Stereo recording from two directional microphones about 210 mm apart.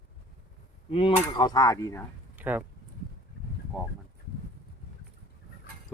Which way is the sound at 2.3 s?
10° right (ahead or behind).